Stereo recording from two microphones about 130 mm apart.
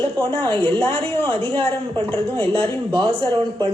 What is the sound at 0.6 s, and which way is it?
Speech, 10° left (ahead or behind).